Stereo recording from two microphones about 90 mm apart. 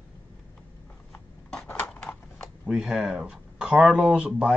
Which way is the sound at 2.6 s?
5° right (ahead or behind).